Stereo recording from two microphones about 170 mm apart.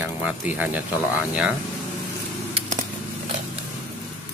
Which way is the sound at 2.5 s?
40° right (ahead or behind).